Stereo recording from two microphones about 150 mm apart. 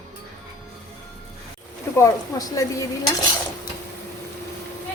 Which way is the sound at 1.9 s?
20° left (ahead or behind).